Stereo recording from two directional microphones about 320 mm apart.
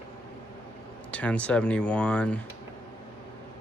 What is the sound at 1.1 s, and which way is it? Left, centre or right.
Speech, centre.